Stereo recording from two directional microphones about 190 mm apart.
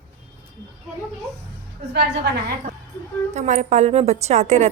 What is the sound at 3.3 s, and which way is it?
A woman's voice, 40° right (ahead or behind).